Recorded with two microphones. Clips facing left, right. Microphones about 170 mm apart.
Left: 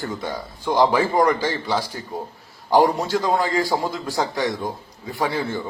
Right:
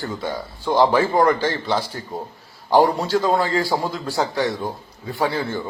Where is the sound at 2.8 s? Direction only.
20° left (ahead or behind).